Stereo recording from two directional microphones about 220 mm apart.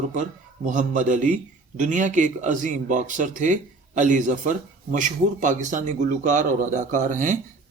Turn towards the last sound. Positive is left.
turn(degrees=-35)  # may be behind; listen again after turning